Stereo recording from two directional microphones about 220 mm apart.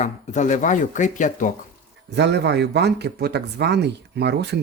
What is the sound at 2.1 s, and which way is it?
Speech, 50° right (ahead or behind).